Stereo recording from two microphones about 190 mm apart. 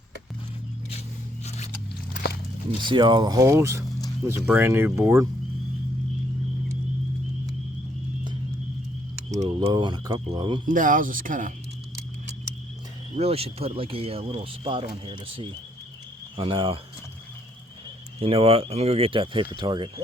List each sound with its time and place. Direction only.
1.5 s a sound: 35° left (ahead or behind)
2.8 s speech: 25° right (ahead or behind)
9.3 s speech: 20° right (ahead or behind)
10.7 s speech: 45° right (ahead or behind)
13.1 s speech: 30° right (ahead or behind)
18.2 s speech: 30° right (ahead or behind)